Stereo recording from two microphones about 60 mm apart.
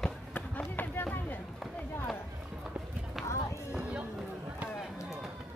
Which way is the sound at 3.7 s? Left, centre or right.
Centre.